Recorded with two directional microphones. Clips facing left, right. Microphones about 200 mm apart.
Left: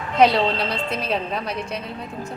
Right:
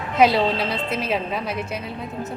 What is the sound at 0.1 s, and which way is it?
A woman's voice, 5° right (ahead or behind).